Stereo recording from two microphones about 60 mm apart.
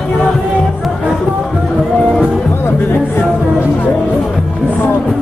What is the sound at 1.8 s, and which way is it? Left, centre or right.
Music, centre.